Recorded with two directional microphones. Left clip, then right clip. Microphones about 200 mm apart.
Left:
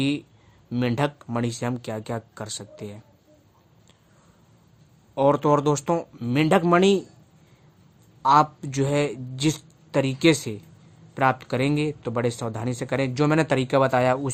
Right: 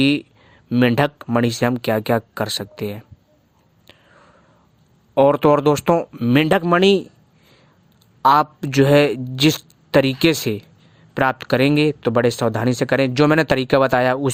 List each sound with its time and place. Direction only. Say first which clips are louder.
0.7 s speech: right 8 dB; 40° right (ahead or behind)
5.1 s speech: right 6 dB; 45° right (ahead or behind)
8.2 s speech: right 4 dB; 45° right (ahead or behind)